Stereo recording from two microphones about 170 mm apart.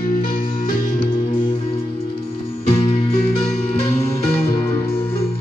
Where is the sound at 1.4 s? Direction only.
25° left (ahead or behind).